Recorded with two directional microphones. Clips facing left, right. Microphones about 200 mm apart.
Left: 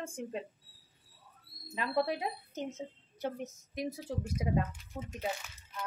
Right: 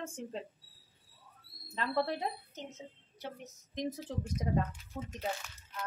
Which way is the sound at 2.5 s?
50° left (ahead or behind).